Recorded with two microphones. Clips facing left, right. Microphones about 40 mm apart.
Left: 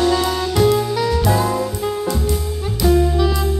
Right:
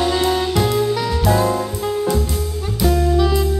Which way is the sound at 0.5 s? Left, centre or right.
Centre.